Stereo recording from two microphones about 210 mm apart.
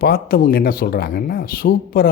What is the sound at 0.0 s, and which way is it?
Speech, 45° left (ahead or behind).